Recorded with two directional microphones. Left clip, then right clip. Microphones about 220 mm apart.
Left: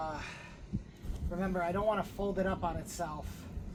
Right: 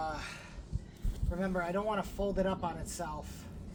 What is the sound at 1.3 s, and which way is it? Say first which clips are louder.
Speech: even; 20° right (ahead or behind).